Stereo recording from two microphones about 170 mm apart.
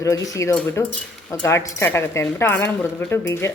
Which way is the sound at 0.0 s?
20° left (ahead or behind).